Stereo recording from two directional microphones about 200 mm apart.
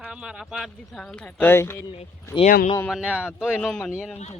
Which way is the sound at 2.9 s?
5° right (ahead or behind).